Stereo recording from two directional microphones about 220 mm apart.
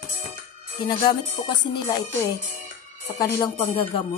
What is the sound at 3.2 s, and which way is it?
Speech, 15° left (ahead or behind).